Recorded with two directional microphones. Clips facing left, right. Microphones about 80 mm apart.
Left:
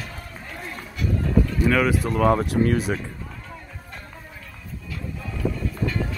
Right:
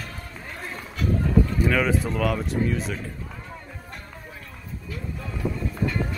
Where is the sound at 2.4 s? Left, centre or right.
Left.